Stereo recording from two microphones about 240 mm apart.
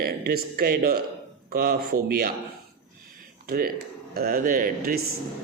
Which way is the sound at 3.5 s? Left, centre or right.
Right.